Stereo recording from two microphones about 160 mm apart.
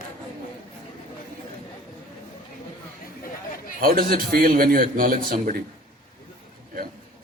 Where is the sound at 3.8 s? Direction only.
65° right (ahead or behind).